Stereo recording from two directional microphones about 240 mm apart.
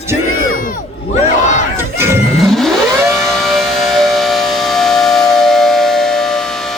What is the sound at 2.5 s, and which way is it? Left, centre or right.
Vehicle, centre.